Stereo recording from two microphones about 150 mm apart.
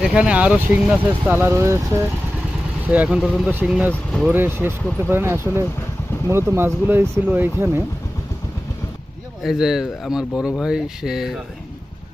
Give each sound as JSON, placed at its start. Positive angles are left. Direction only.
{"t": 0.0, "sound": "speech", "side_deg": -5}
{"t": 3.9, "sound": "speech", "side_deg": 5}
{"t": 4.3, "sound": "speech", "side_deg": -15}
{"t": 9.4, "sound": "speech", "side_deg": 0}